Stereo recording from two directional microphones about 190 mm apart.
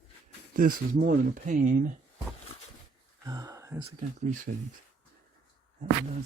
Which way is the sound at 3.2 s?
20° right (ahead or behind).